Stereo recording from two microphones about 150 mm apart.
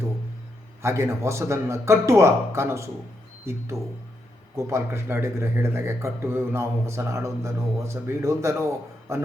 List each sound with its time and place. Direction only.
0.8 s speech: 15° right (ahead or behind)